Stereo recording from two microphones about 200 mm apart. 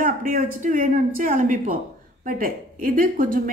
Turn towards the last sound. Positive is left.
turn(degrees=-45)  # may be behind; listen again after turning